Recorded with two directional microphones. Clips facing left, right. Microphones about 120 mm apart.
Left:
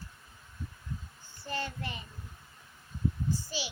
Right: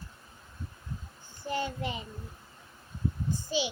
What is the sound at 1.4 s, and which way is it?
Speech, 15° right (ahead or behind).